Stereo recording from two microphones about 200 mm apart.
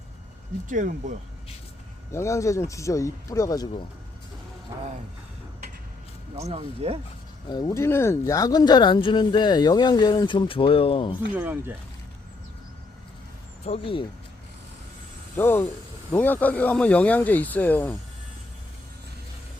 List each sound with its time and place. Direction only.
0.7 s speech: 40° right (ahead or behind)
2.1 s speech: 15° left (ahead or behind)
6.3 s speech: 30° right (ahead or behind)
7.5 s speech: 15° left (ahead or behind)
11.3 s speech: 10° right (ahead or behind)
13.7 s speech: 25° left (ahead or behind)
15.4 s speech: 10° left (ahead or behind)